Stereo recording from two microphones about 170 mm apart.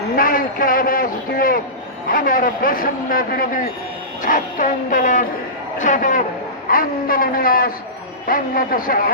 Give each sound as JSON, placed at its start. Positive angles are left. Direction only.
{"t": 0.2, "sound": "a man's voice", "side_deg": 55}